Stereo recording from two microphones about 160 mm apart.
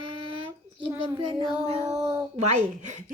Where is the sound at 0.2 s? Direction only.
35° right (ahead or behind).